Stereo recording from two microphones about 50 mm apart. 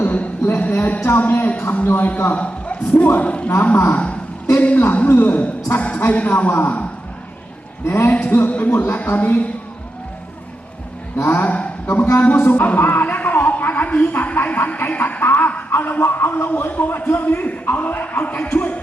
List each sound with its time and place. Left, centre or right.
0.0 s a sound: left
0.5 s speech: left
7.9 s speech: left
8.3 s speech: left
8.7 s speech: left
9.0 s speech: left
11.3 s a woman's voice: left
12.5 s music: left
13.8 s speech: left